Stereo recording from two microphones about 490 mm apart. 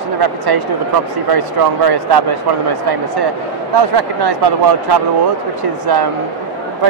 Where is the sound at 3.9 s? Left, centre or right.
Right.